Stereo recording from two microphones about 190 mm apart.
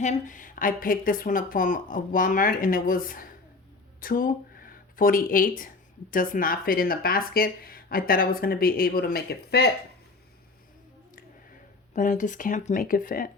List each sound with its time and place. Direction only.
0.0 s speech: 40° left (ahead or behind); by 9.6 s 55° left (ahead or behind)
11.9 s speech: 45° left (ahead or behind)